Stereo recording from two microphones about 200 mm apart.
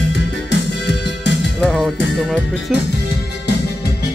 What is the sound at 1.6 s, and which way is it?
Music, centre (ahead or behind).